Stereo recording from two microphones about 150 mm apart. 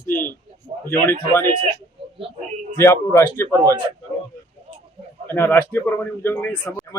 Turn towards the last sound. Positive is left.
turn(degrees=15)  # may be behind; listen again after turning